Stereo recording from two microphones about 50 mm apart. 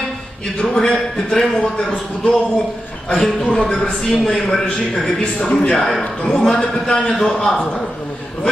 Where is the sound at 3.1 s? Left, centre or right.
Centre.